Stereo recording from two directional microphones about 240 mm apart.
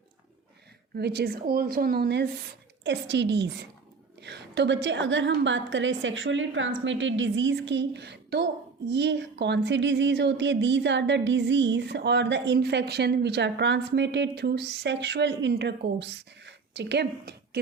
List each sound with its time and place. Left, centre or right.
0.9 s a woman's voice: right